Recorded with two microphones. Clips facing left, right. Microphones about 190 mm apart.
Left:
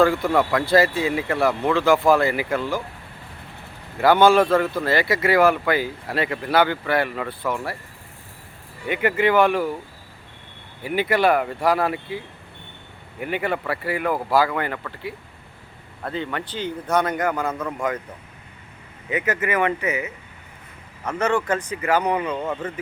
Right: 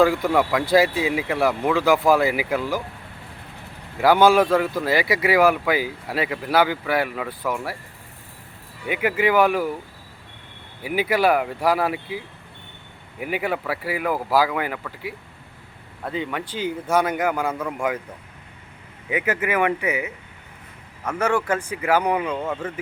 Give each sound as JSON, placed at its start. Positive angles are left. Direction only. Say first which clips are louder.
{"t": 0.0, "sound": "speech", "louder": "even", "side_deg": -5}
{"t": 3.9, "sound": "speech", "louder": "even", "side_deg": -10}
{"t": 8.9, "sound": "speech", "louder": "left 1 dB", "side_deg": -5}
{"t": 10.8, "sound": "speech", "louder": "even", "side_deg": -5}
{"t": 19.1, "sound": "speech", "louder": "even", "side_deg": -10}